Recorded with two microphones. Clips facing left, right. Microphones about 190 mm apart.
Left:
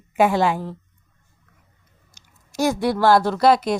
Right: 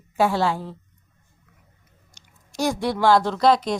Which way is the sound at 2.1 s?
5° left (ahead or behind).